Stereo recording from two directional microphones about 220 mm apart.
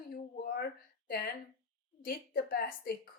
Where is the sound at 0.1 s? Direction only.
45° left (ahead or behind).